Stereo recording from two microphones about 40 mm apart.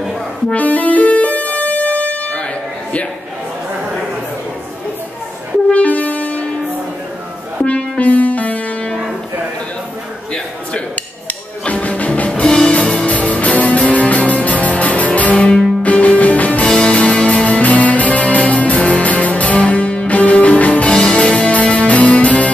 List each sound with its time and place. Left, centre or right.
0.6 s music: left
5.7 s music: left
7.6 s music: left
11.6 s music: left
15.4 s music: centre
15.8 s music: left
16.6 s music: centre; by 20.9 s left
20.9 s music: left